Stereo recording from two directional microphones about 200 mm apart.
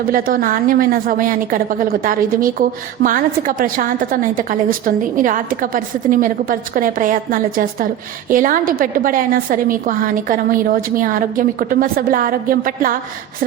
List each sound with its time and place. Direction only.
0.1 s a woman's voice: 45° right (ahead or behind)